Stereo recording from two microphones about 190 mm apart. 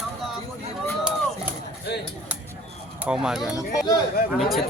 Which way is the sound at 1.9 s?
60° left (ahead or behind).